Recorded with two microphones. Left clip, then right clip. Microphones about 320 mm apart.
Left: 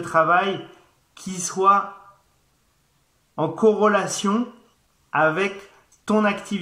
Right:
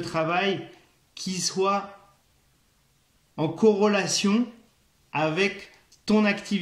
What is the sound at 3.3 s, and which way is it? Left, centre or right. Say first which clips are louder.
A man's voice: left 3 dB; left.